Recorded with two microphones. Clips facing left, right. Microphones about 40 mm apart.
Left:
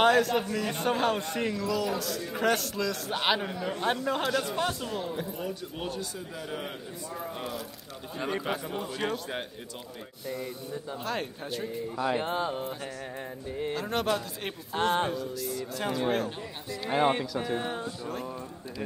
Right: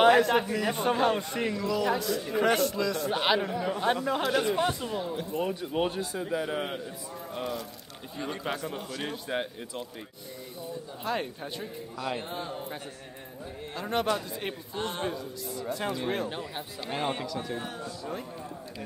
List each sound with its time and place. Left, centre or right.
0.1 s a man's voice: centre
4.3 s a man's voice: centre
5.3 s a man's voice: right
7.3 s speech: centre
11.1 s a man's voice: centre
12.4 s speech: left
13.7 s speech: centre
14.7 s speech: left
15.0 s a man's voice: centre
16.8 s speech: centre